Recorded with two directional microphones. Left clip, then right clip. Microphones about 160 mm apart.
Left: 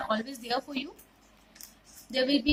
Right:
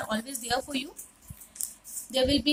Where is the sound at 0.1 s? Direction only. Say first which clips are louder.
Even; 10° right (ahead or behind).